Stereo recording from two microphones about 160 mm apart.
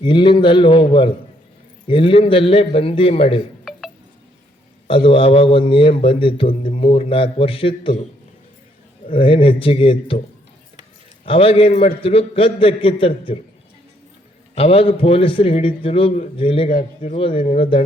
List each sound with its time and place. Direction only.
0.0 s a man's voice: 30° left (ahead or behind)
3.6 s music: centre (ahead or behind)
4.9 s a man's voice: 35° left (ahead or behind)
9.0 s a man's voice: 35° left (ahead or behind)
11.3 s a man's voice: 35° left (ahead or behind)
14.5 s a man's voice: 35° left (ahead or behind)